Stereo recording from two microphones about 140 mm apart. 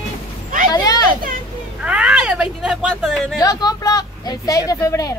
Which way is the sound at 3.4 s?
30° left (ahead or behind).